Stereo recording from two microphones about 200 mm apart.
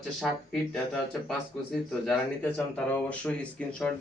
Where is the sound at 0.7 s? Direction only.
5° left (ahead or behind).